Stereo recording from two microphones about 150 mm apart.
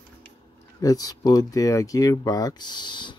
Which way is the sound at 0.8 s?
25° left (ahead or behind).